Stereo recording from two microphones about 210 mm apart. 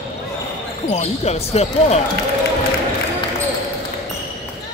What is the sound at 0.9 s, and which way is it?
Speech, 30° left (ahead or behind).